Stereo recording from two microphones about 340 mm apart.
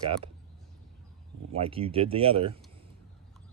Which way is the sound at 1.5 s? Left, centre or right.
Centre.